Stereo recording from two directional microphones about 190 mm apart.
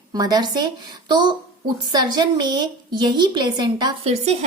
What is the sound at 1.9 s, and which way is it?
A woman's voice, 20° right (ahead or behind).